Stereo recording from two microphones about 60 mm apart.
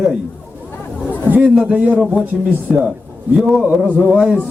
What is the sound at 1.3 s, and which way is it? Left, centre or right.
Speech, right.